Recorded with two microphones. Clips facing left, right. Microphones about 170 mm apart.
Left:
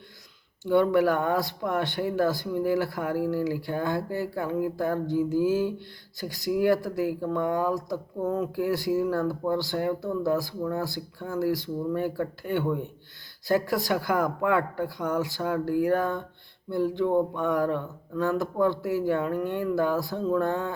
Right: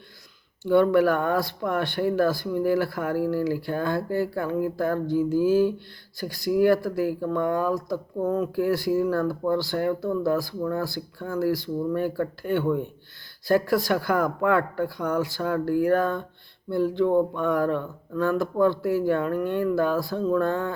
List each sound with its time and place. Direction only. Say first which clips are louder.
0.6 s speech: right 3 dB; 20° left (ahead or behind)